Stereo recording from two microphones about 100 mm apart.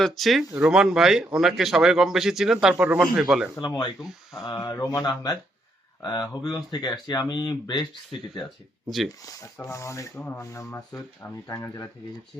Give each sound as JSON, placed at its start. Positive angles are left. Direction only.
{"t": 0.0, "sound": "a man's voice", "side_deg": 0}
{"t": 3.6, "sound": "speech", "side_deg": 45}
{"t": 4.6, "sound": "speech", "side_deg": 35}
{"t": 9.6, "sound": "speech", "side_deg": 30}